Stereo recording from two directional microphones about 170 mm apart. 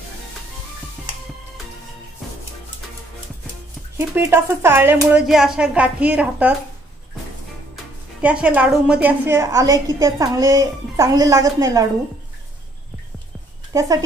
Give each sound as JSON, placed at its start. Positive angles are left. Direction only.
{"t": 4.0, "sound": "a woman's voice", "side_deg": -15}
{"t": 7.7, "sound": "a woman's voice", "side_deg": -5}
{"t": 13.7, "sound": "speech", "side_deg": -20}